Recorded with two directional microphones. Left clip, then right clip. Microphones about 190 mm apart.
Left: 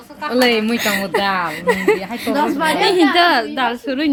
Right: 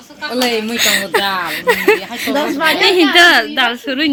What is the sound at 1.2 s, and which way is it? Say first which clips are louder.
Speech: right 1 dB; 50° left (ahead or behind).